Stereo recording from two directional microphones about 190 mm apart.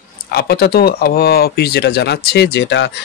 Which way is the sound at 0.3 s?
55° left (ahead or behind).